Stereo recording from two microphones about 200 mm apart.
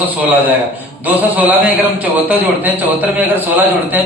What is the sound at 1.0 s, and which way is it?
A man's voice, 10° right (ahead or behind).